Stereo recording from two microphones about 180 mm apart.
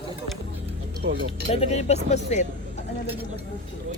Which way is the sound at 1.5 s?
35° left (ahead or behind).